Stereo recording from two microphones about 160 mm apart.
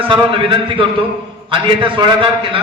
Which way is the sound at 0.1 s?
35° right (ahead or behind).